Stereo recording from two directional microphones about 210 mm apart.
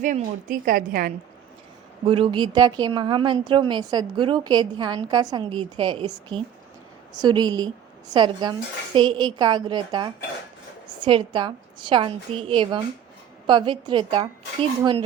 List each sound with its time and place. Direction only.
0.0 s a woman's voice: 40° right (ahead or behind)
2.0 s speech: 25° right (ahead or behind)